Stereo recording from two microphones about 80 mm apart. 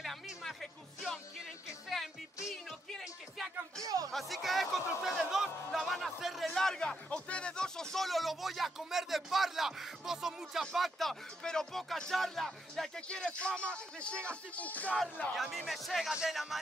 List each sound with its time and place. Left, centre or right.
0.0 s music: centre
3.8 s a sound: right
4.1 s speech: centre
5.0 s music: centre
6.4 s speech: centre
15.3 s speech: centre